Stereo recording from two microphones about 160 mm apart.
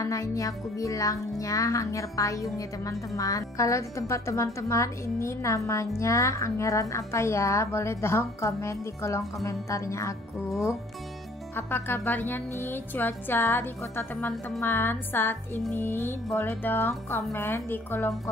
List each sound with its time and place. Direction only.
0.0 s a woman's voice: 20° left (ahead or behind)
11.5 s speech: 15° left (ahead or behind)